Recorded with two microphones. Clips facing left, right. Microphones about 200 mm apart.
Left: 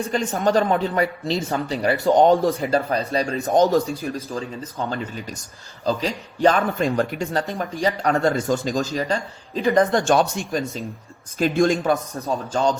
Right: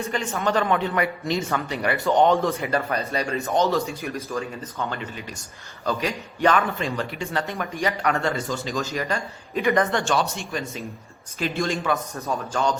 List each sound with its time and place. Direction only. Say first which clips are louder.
0.1 s a man's voice: left 5 dB; 35° left (ahead or behind)
3.4 s a man's voice: left 6 dB; 45° left (ahead or behind)
8.8 s a man's voice: left 3 dB; 30° left (ahead or behind)
12.1 s a man's voice: left 3 dB; 15° left (ahead or behind)